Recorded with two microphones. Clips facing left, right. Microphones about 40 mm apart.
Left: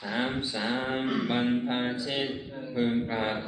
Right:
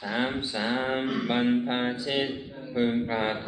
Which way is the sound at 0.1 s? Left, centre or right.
Centre.